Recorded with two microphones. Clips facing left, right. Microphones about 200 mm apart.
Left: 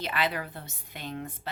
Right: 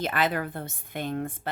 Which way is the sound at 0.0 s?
45° right (ahead or behind).